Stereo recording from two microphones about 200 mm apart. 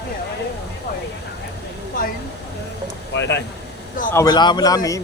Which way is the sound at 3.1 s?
60° left (ahead or behind).